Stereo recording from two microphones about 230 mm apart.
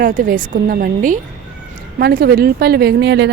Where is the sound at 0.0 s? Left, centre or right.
Right.